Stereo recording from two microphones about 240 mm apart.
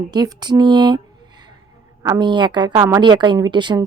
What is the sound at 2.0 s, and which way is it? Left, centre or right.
A woman's voice, centre.